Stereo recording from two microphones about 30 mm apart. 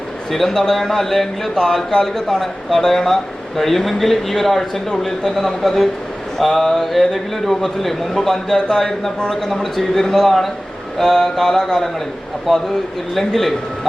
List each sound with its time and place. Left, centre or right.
0.3 s a man's voice: centre